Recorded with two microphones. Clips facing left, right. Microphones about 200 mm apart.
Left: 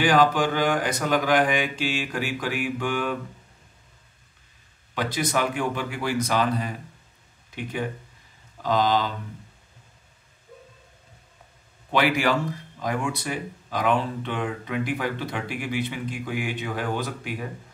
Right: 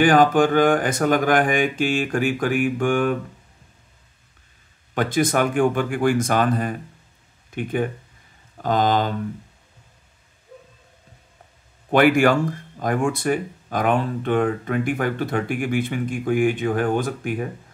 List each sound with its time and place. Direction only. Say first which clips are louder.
0.0 s speech: right 5 dB; 50° right (ahead or behind)
4.9 s speech: right 6 dB; 50° right (ahead or behind)
11.9 s speech: right 7 dB; 50° right (ahead or behind)